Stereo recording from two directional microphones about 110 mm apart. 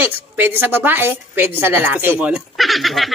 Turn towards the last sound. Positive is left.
turn(degrees=0)  # may be behind; listen again after turning